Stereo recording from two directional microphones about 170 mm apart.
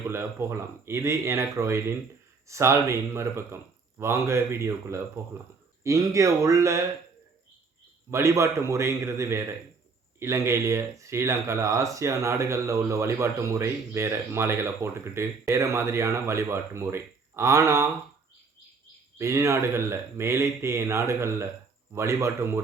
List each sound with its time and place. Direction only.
0.1 s speech: 15° right (ahead or behind)
8.1 s speech: 15° right (ahead or behind)
19.2 s speech: 15° right (ahead or behind)